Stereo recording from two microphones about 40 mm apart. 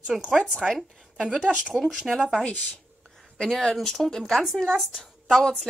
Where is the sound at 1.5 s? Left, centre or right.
Right.